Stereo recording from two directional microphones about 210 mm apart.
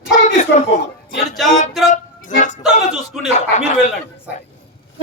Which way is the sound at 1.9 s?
35° left (ahead or behind).